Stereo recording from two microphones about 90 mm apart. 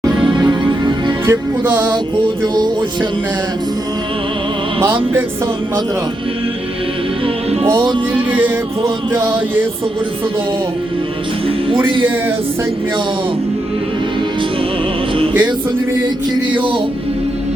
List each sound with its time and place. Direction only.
0.3 s music: 55° right (ahead or behind)
1.3 s music: 20° right (ahead or behind)
2.4 s music: 55° right (ahead or behind)
7.8 s music: 65° right (ahead or behind)
8.3 s music: 20° right (ahead or behind)
15.3 s music: 20° right (ahead or behind)
16.6 s music: 70° right (ahead or behind)